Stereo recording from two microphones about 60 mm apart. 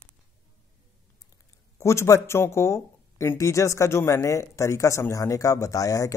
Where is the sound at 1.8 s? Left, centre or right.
Left.